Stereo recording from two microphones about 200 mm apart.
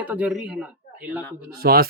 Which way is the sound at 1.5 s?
50° right (ahead or behind).